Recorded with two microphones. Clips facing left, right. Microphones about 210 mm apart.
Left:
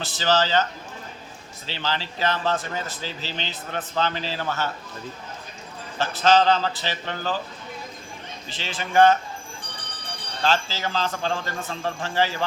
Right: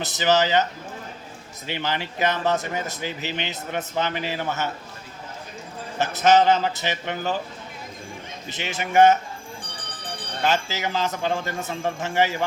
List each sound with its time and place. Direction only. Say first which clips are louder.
0.2 s speech: right 2 dB; 15° right (ahead or behind)
6.0 s a man's voice: right 1 dB; 20° right (ahead or behind)
8.4 s a man's voice: right 3 dB; 20° right (ahead or behind)
10.4 s speech: even; 20° right (ahead or behind)